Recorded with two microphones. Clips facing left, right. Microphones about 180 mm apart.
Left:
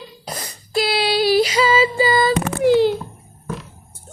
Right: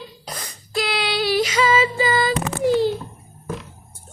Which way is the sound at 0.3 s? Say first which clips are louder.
Left 6 dB; 35° left (ahead or behind).